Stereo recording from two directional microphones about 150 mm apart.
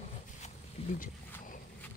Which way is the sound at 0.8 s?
40° left (ahead or behind).